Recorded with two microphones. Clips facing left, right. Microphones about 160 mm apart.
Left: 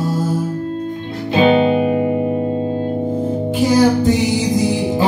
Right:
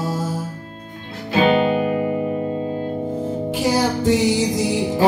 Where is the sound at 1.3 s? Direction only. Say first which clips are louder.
Left 4 dB; 25° left (ahead or behind).